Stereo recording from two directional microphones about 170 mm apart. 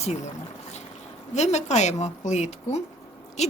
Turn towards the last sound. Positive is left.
turn(degrees=40)  # may be behind; listen again after turning